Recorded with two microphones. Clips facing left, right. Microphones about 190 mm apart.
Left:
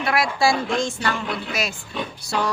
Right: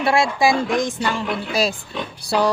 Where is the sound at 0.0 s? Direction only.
25° right (ahead or behind).